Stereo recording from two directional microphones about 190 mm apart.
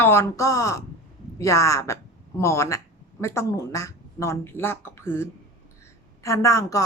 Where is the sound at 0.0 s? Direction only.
15° left (ahead or behind).